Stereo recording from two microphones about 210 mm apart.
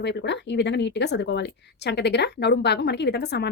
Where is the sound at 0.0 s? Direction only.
55° left (ahead or behind).